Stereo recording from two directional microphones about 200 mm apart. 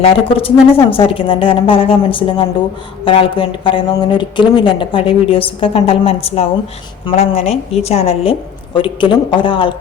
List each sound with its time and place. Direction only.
0.0 s speech: 30° left (ahead or behind)